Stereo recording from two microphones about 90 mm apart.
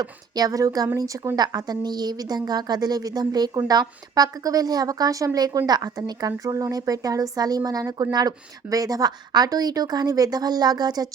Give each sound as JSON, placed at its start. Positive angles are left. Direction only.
{"t": 0.0, "sound": "a woman's voice", "side_deg": -45}